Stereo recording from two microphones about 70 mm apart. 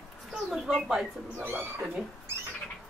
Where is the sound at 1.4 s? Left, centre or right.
Right.